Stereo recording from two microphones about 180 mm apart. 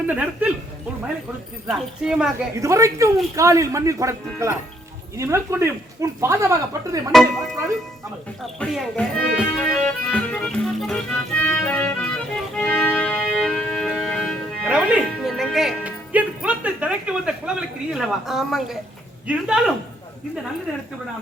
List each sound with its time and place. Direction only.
0.1 s speech: 10° right (ahead or behind)
1.6 s speech: centre (ahead or behind)
2.6 s speech: 15° right (ahead or behind)
7.1 s speech: centre (ahead or behind)
8.5 s speech: 5° left (ahead or behind)
9.3 s music: 5° left (ahead or behind)
19.3 s speech: 5° right (ahead or behind)